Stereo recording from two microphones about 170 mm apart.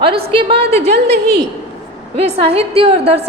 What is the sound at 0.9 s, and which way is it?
Speech, 80° right.